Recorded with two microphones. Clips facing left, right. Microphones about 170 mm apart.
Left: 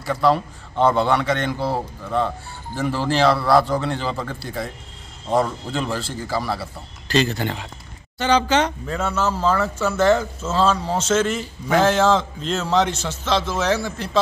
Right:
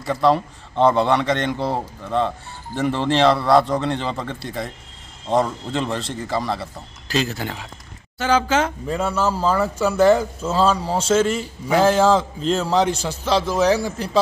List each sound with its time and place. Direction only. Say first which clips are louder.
0.0 s speech: right 1 dB; centre (ahead or behind)
5.8 s speech: right 1 dB; 25° right (ahead or behind)
6.0 s speech: right 1 dB; 5° left (ahead or behind); by 13.9 s 15° right (ahead or behind)